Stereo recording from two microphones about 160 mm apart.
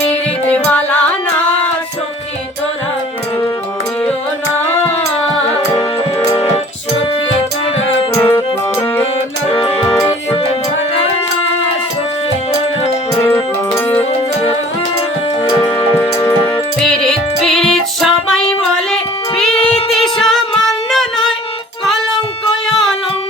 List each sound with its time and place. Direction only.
0.0 s music: 10° left (ahead or behind)
5.7 s music: 15° left (ahead or behind)
8.1 s music: 15° left (ahead or behind)
9.5 s music: 30° left (ahead or behind)
9.9 s music: 15° left (ahead or behind)
13.1 s music: 15° left (ahead or behind)
14.0 s music: 40° left (ahead or behind)
15.6 s music: 15° left (ahead or behind)
16.8 s music: 5° left (ahead or behind)
19.5 s female singing: 40° left (ahead or behind)
19.9 s music: centre (ahead or behind)